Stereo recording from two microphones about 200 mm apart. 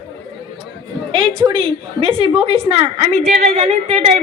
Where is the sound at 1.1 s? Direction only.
25° right (ahead or behind).